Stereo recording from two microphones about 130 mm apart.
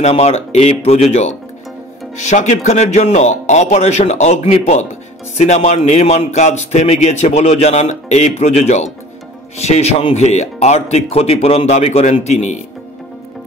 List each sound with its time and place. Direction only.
0.0 s speech: 55° left (ahead or behind)